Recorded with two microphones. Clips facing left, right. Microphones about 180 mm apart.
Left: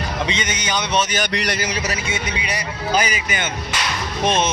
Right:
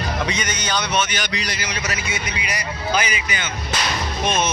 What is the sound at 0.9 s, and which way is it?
A man's voice, 40° left (ahead or behind).